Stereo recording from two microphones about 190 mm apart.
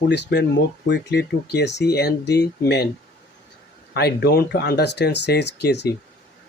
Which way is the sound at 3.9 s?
60° left (ahead or behind).